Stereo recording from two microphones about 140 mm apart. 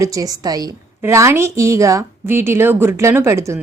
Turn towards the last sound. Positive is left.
turn(degrees=-20)  # may be behind; listen again after turning